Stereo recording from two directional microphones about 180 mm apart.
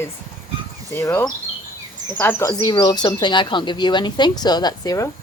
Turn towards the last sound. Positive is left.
turn(degrees=20)  # may be behind; listen again after turning